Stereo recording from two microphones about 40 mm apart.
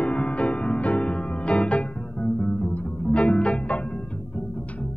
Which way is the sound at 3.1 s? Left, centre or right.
Left.